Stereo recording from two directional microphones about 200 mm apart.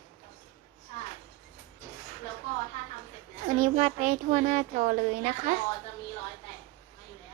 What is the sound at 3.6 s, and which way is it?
A child's voice, 35° right (ahead or behind).